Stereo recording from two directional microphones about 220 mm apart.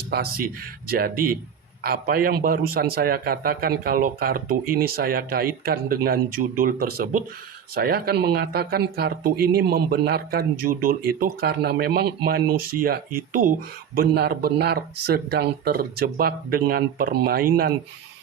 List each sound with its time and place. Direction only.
0.1 s a man's voice: 45° right (ahead or behind)